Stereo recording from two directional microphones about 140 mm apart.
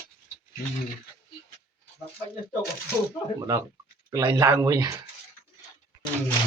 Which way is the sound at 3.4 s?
20° right (ahead or behind).